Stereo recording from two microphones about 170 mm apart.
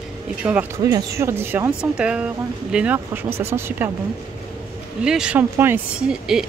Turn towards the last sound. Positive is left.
turn(degrees=-5)  # may be behind; listen again after turning